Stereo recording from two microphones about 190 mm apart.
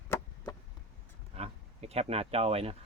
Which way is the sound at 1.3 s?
35° right (ahead or behind).